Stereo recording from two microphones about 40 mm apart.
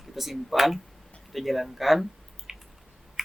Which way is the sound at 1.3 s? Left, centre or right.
Centre.